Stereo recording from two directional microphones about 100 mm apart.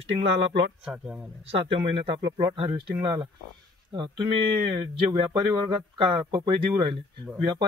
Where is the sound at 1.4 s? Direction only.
65° right (ahead or behind).